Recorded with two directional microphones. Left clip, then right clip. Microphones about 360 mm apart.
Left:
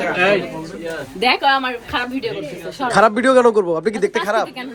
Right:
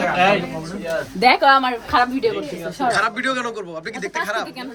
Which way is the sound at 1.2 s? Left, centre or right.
Right.